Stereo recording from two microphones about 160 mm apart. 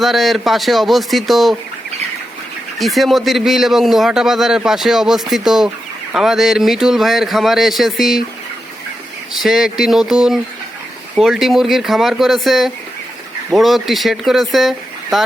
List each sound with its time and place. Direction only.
0.0 s a man's voice: centre (ahead or behind)
2.7 s a man's voice: centre (ahead or behind)
9.3 s a man's voice: centre (ahead or behind)